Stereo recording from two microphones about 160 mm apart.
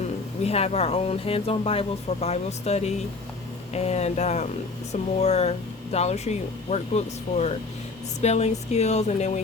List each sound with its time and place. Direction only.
0.4 s speech: 40° left (ahead or behind)